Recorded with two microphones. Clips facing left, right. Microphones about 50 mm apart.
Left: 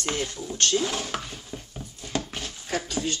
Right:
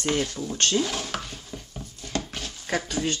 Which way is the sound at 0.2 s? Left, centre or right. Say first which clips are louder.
Right 3 dB; left.